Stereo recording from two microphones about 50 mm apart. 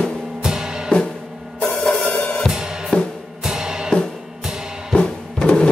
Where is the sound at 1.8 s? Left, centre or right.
Centre.